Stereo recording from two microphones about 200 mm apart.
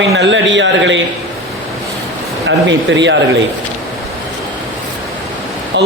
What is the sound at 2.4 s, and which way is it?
Speech, 65° right (ahead or behind).